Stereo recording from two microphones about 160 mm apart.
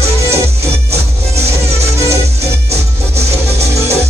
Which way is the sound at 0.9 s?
40° right (ahead or behind).